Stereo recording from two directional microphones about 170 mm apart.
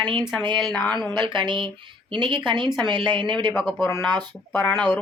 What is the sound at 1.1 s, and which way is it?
A woman's voice, 25° right (ahead or behind).